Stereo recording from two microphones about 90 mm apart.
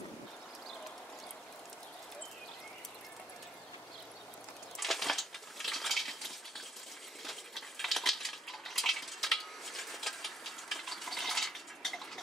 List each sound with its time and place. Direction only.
4.7 s cutlery: centre (ahead or behind)